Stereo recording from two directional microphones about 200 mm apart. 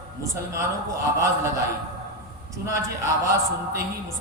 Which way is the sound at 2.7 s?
15° right (ahead or behind).